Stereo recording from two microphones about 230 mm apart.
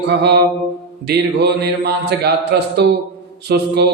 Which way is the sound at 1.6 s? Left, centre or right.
Right.